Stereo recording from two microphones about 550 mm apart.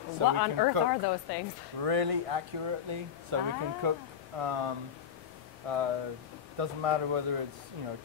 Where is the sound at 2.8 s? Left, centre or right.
Right.